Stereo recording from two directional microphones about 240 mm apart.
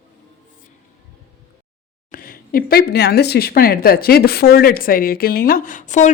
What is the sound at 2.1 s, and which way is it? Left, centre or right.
Speech, left.